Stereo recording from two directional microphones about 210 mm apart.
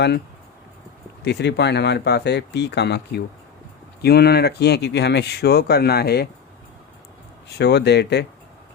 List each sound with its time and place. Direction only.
1.2 s speech: 55° left (ahead or behind)
7.4 s speech: 55° left (ahead or behind)